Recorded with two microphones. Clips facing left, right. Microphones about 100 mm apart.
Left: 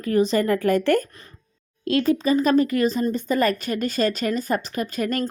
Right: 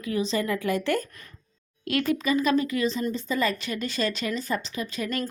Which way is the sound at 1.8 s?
30° left (ahead or behind).